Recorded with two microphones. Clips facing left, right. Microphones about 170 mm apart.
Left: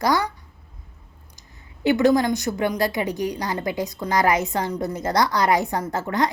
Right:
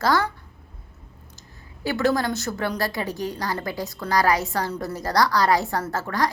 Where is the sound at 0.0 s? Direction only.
15° left (ahead or behind).